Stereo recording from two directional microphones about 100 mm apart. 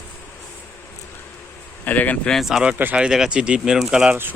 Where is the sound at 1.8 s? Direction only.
15° left (ahead or behind).